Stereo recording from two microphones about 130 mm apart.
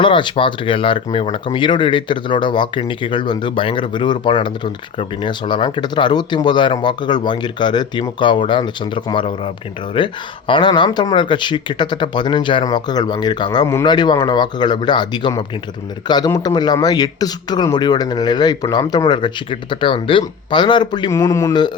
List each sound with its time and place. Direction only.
0.0 s speech: 40° left (ahead or behind)
21.1 s speech: 25° left (ahead or behind)